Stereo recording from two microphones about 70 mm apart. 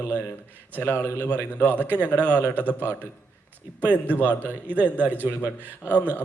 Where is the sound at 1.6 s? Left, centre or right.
Right.